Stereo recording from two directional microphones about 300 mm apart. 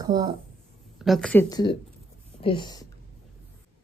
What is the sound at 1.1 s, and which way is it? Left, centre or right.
A woman's voice, centre.